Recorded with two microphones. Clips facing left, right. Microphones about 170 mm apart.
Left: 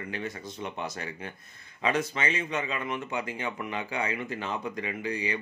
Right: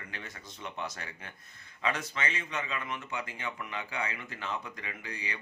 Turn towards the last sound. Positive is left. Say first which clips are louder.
# left 10 dB
turn(degrees=15)  # may be behind; listen again after turning